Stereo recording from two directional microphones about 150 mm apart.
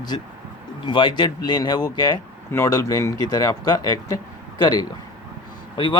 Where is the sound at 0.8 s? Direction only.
30° left (ahead or behind).